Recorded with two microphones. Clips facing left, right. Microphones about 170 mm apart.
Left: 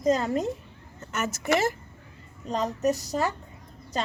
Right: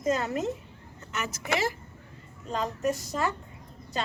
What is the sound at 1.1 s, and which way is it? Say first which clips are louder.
A woman's voice: left 5 dB; 45° left (ahead or behind).